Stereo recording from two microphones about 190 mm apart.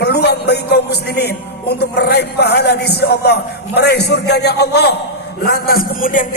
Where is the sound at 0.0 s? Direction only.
60° left (ahead or behind).